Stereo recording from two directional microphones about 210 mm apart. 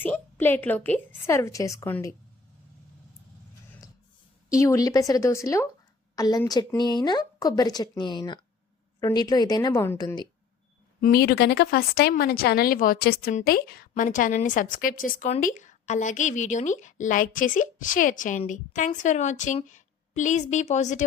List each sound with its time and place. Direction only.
0.0 s a woman's voice: 10° left (ahead or behind)
4.4 s a woman's voice: 15° left (ahead or behind)
11.0 s a woman's voice: 50° left (ahead or behind)